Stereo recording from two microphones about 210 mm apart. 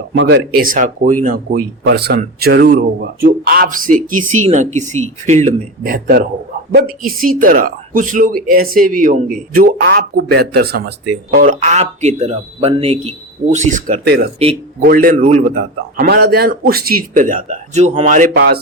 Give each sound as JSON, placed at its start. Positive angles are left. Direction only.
{"t": 0.2, "sound": "speech", "side_deg": -50}
{"t": 15.5, "sound": "speech", "side_deg": -50}
{"t": 18.3, "sound": "speech", "side_deg": -50}